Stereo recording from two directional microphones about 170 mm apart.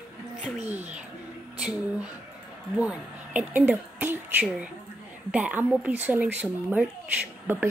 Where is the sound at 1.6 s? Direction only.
5° right (ahead or behind).